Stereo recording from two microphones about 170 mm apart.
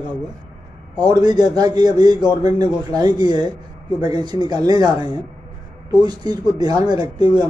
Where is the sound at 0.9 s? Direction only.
25° right (ahead or behind).